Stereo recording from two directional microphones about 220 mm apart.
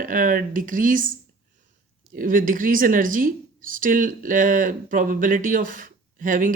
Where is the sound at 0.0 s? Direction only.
40° right (ahead or behind).